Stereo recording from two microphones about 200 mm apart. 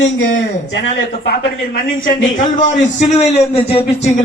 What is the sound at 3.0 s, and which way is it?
A man's voice, 35° left (ahead or behind).